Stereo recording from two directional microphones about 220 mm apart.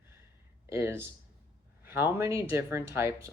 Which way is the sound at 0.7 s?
10° right (ahead or behind).